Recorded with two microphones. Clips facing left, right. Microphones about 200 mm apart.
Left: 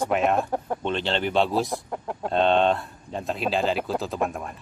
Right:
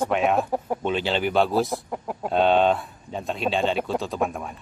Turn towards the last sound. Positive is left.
turn(degrees=0)  # may be behind; listen again after turning